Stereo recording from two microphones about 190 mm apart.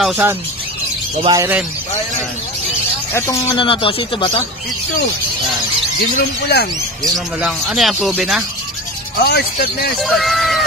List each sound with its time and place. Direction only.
0.0 s speech: 10° right (ahead or behind)
3.1 s speech: 15° left (ahead or behind)
6.1 s speech: 55° left (ahead or behind)
7.4 s speech: centre (ahead or behind)
9.2 s speech: 55° left (ahead or behind)
10.0 s speech: centre (ahead or behind)